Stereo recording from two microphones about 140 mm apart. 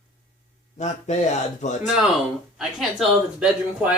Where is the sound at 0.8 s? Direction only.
55° left (ahead or behind).